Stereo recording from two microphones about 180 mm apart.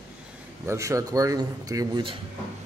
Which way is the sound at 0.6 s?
15° right (ahead or behind).